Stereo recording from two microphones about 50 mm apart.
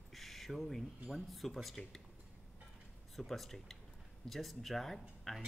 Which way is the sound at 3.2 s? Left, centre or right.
Centre.